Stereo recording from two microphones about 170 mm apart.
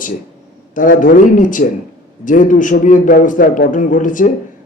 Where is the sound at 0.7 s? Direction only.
50° left (ahead or behind).